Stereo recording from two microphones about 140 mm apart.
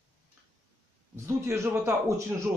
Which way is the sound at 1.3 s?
20° right (ahead or behind).